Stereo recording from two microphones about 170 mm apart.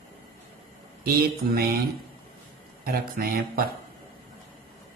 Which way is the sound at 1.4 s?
65° right (ahead or behind).